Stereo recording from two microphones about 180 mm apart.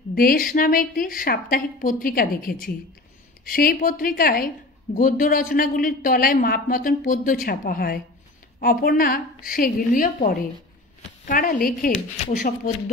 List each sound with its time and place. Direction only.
0.1 s speech: 55° left (ahead or behind)